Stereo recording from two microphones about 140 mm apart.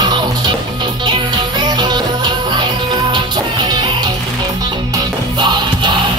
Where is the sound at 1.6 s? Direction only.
30° right (ahead or behind).